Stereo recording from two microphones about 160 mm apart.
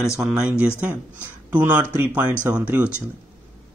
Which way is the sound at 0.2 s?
5° right (ahead or behind).